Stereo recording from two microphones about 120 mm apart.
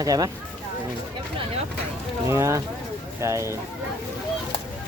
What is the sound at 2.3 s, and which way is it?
Speech, 25° right (ahead or behind).